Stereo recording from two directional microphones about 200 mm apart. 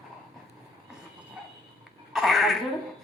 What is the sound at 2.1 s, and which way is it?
Cough, centre (ahead or behind).